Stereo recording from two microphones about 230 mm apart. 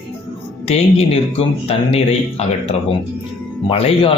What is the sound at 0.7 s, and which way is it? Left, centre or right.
A man's voice, left.